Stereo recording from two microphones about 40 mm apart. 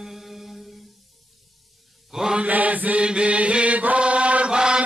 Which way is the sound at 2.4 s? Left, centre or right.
Right.